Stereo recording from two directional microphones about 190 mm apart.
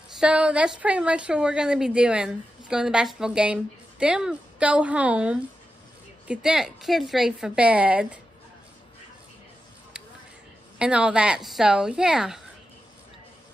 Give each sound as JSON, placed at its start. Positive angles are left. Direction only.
{"t": 0.2, "sound": "a woman's voice", "side_deg": -5}
{"t": 9.9, "sound": "a sound", "side_deg": -5}
{"t": 10.8, "sound": "a woman's voice", "side_deg": -5}